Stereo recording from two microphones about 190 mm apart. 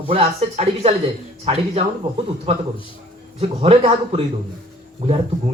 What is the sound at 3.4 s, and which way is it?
Speech, 30° right (ahead or behind).